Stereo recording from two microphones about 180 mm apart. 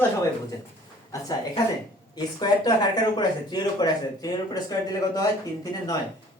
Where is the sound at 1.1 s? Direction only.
20° left (ahead or behind).